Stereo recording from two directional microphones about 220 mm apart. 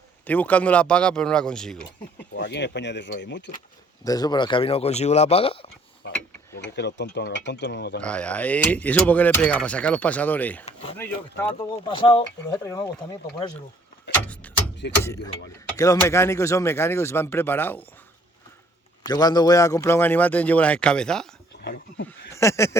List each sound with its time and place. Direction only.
0.3 s speech: 5° left (ahead or behind)
2.3 s speech: 55° left (ahead or behind)
4.0 s speech: 15° left (ahead or behind)
6.7 s speech: 50° left (ahead or behind)
8.0 s speech: 5° left (ahead or behind)
10.7 s speech: 30° left (ahead or behind)
10.9 s speech: 10° left (ahead or behind)
11.9 s speech: 20° left (ahead or behind)
14.4 s a sound: 5° left (ahead or behind)
15.0 s speech: 15° left (ahead or behind)
19.0 s speech: 20° left (ahead or behind)
21.6 s speech: 50° left (ahead or behind)
22.3 s speech: 15° left (ahead or behind)